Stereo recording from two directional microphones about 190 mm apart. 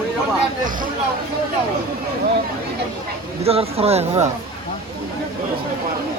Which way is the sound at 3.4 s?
30° right (ahead or behind).